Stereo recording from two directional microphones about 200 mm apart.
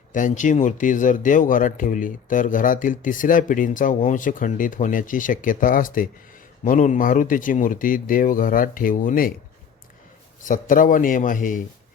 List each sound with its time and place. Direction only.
0.1 s speech: 40° left (ahead or behind)
10.4 s speech: 40° left (ahead or behind)